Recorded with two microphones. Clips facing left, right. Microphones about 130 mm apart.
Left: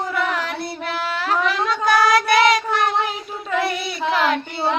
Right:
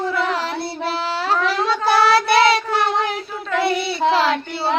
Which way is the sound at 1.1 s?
30° right (ahead or behind).